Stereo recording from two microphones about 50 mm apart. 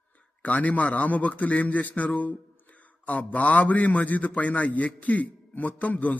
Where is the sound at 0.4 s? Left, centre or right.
Left.